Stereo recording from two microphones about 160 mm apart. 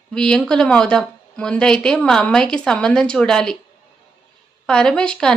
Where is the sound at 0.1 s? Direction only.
5° left (ahead or behind).